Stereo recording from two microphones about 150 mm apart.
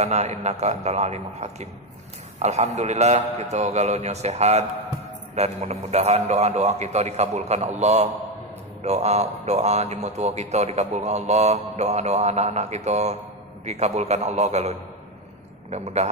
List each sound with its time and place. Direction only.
0.0 s a man's voice: 50° right (ahead or behind)